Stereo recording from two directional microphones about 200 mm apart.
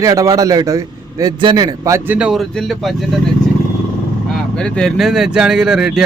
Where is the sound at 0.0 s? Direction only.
15° right (ahead or behind); by 3.1 s centre (ahead or behind).